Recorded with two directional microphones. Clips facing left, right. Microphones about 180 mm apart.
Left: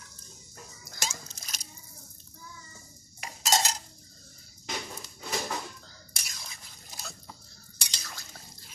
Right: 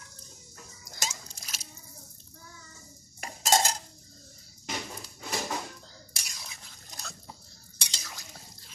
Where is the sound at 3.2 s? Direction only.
50° right (ahead or behind).